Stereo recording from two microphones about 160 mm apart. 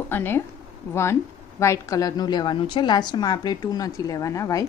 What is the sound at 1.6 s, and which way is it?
A woman's voice, 20° left (ahead or behind).